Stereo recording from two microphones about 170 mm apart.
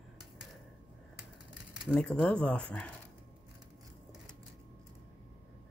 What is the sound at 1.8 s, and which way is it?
Dishes, centre (ahead or behind).